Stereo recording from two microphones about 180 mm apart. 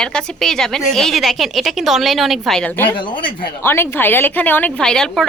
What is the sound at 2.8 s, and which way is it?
Speech, 25° left (ahead or behind).